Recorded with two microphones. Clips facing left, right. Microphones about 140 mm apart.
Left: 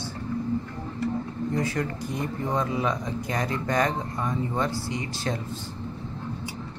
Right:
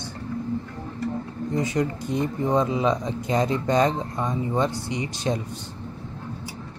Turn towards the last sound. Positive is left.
turn(degrees=-20)  # may be behind; listen again after turning